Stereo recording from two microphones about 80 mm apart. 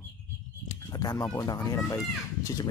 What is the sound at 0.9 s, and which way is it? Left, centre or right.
Speech, left.